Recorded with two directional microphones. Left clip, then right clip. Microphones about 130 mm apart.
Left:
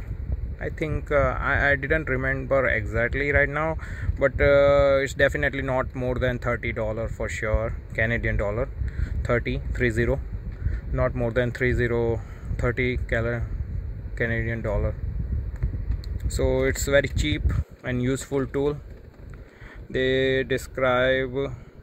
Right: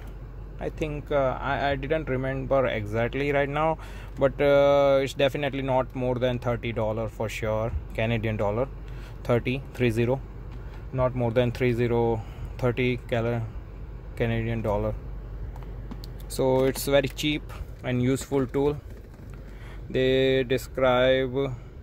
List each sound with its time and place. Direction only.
0.7 s speech: 20° left (ahead or behind)
2.6 s speech: centre (ahead or behind)
11.1 s speech: 5° left (ahead or behind)
16.3 s speech: centre (ahead or behind)
19.9 s speech: centre (ahead or behind)